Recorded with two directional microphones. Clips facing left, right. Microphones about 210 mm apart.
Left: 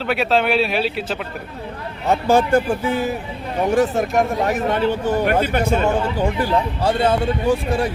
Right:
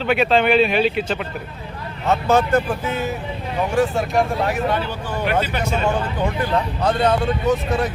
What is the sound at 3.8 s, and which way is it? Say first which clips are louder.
Speech: right 1 dB; 40° left (ahead or behind).